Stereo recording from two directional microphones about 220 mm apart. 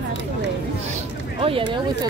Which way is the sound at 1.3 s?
25° right (ahead or behind).